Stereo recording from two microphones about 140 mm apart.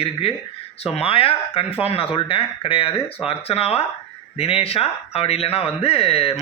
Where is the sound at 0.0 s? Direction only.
45° left (ahead or behind).